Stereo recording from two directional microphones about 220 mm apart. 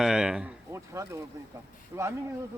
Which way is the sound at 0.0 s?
Centre (ahead or behind).